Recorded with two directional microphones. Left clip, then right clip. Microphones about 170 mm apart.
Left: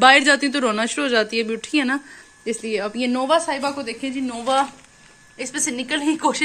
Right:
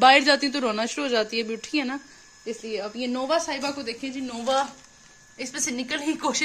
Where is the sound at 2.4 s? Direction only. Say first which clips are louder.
Left 7 dB; 15° left (ahead or behind).